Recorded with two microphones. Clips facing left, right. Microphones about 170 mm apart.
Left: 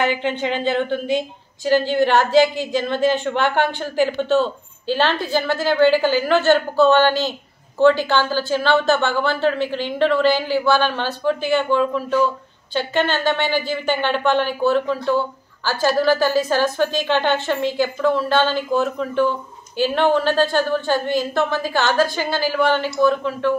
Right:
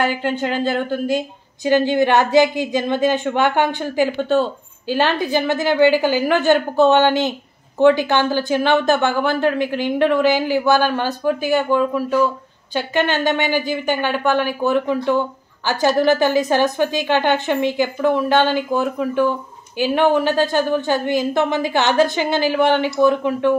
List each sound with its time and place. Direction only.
0.2 s a woman's voice: 5° right (ahead or behind)